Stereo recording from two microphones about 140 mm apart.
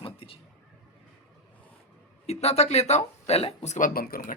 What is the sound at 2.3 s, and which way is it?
Speech, 50° left (ahead or behind).